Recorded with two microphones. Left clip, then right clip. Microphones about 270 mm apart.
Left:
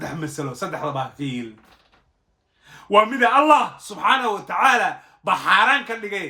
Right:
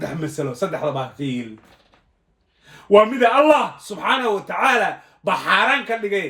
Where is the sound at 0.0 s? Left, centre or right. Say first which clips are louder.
Right 3 dB; centre.